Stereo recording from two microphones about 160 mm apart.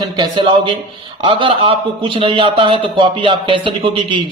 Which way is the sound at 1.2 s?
35° right (ahead or behind).